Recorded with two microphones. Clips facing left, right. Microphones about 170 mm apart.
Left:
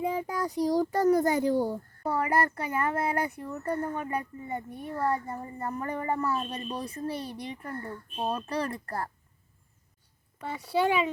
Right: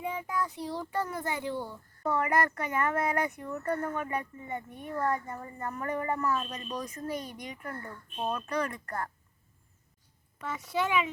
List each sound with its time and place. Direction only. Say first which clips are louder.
0.0 s speech: left 4 dB; 35° left (ahead or behind)
10.4 s speech: left 5 dB; 35° left (ahead or behind)